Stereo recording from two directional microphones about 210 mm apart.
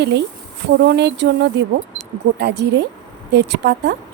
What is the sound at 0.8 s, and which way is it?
Speech, 55° right (ahead or behind).